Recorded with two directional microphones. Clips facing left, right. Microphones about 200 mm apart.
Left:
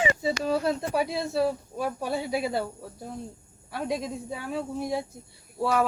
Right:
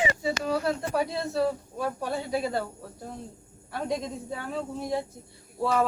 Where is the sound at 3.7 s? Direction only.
5° left (ahead or behind).